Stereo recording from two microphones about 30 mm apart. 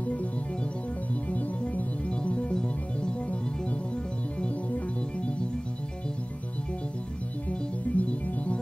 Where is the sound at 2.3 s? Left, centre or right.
Left.